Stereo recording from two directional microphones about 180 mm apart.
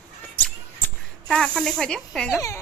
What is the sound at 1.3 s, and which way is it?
A woman's voice, 5° left (ahead or behind).